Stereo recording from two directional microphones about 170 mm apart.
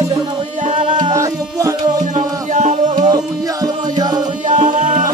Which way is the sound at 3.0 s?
25° right (ahead or behind).